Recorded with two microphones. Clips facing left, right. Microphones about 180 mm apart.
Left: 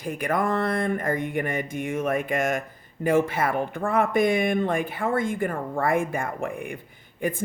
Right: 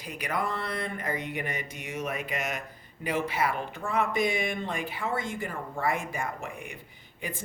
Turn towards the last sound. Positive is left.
turn(degrees=50)  # may be behind; listen again after turning